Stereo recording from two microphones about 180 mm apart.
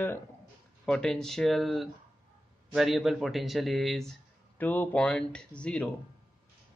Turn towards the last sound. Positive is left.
turn(degrees=5)  # may be behind; listen again after turning